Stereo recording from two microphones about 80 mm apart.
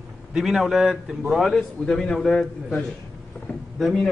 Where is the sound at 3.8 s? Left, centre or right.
Centre.